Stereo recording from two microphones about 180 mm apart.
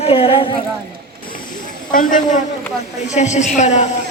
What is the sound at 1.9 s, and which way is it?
A woman's voice, 50° left (ahead or behind).